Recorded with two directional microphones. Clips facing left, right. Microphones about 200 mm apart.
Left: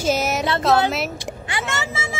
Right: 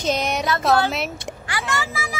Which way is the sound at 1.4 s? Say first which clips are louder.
Right 1 dB; 25° left (ahead or behind).